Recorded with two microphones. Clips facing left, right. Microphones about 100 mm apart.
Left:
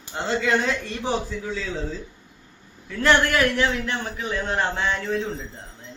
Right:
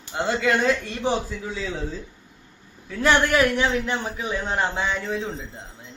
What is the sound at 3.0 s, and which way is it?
A man's voice, 15° right (ahead or behind).